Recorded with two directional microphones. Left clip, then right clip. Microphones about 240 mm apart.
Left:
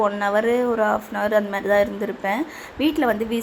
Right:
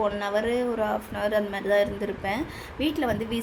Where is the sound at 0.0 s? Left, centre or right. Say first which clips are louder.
Left 6 dB; centre.